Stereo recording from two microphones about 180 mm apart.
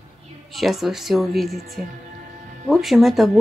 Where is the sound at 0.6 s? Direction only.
Centre (ahead or behind).